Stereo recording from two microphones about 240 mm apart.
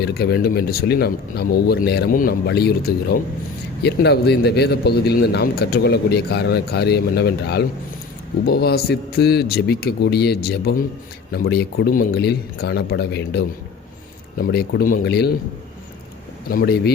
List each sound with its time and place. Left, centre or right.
0.0 s a man's voice: left
16.5 s speech: left